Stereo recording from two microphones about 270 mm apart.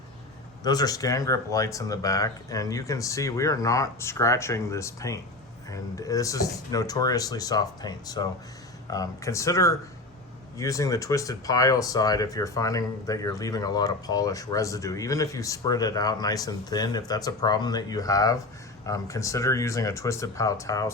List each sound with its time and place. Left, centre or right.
0.6 s speech: centre